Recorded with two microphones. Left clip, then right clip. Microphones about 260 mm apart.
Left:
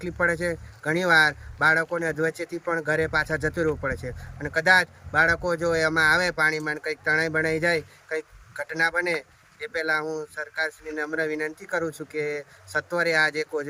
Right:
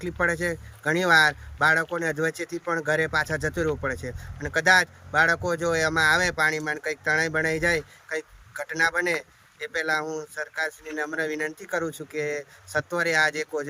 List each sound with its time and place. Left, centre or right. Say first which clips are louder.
0.0 s speech: left 1 dB; centre